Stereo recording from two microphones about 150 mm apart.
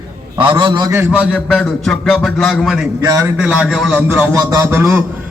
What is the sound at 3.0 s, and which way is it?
Speech, 20° right (ahead or behind).